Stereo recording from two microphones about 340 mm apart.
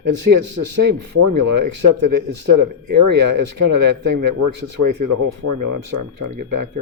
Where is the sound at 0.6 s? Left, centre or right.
Right.